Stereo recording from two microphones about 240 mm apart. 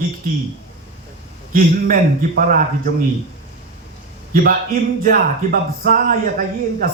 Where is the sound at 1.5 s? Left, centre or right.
Right.